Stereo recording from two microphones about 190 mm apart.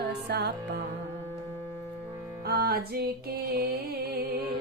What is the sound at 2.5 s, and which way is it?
Music, 55° right (ahead or behind).